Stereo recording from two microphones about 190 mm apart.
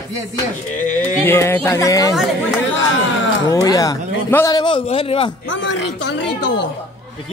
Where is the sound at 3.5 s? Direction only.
20° left (ahead or behind).